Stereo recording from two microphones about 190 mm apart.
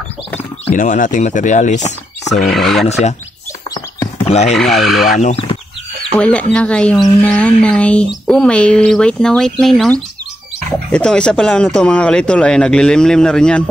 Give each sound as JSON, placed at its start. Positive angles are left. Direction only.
{"t": 0.7, "sound": "speech", "side_deg": 40}
{"t": 2.3, "sound": "speech", "side_deg": 0}
{"t": 2.9, "sound": "speech", "side_deg": 35}
{"t": 4.3, "sound": "speech", "side_deg": 35}
{"t": 4.6, "sound": "speech", "side_deg": 0}
{"t": 5.2, "sound": "speech", "side_deg": 30}
{"t": 6.1, "sound": "speech", "side_deg": 5}